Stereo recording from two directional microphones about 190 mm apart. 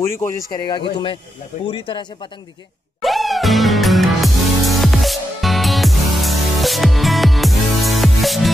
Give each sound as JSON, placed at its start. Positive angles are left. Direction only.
{"t": 0.0, "sound": "speech", "side_deg": 15}
{"t": 0.6, "sound": "speech", "side_deg": 25}
{"t": 3.0, "sound": "music", "side_deg": 0}